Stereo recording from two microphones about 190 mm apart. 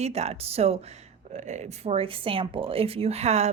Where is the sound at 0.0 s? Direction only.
35° right (ahead or behind).